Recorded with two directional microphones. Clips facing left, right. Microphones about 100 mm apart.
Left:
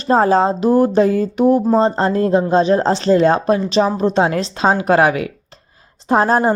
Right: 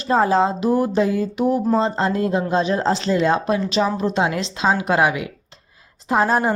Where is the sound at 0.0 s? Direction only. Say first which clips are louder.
Left 4 dB; 40° left (ahead or behind).